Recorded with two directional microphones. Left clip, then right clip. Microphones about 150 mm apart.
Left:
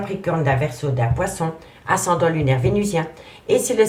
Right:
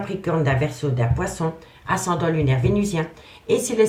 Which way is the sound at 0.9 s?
35° left (ahead or behind).